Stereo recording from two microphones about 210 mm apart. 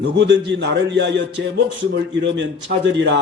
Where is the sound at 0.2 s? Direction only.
55° right (ahead or behind).